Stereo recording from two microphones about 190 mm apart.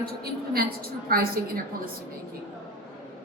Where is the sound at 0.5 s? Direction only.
50° right (ahead or behind).